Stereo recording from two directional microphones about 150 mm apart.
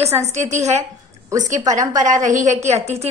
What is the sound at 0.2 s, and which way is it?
A woman's voice, 50° right (ahead or behind).